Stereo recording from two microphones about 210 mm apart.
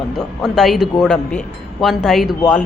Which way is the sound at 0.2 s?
Centre (ahead or behind).